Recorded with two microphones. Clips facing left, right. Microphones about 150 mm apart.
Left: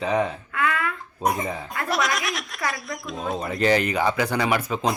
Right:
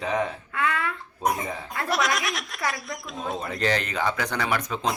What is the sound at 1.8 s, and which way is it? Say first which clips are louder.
Speech: even; centre (ahead or behind).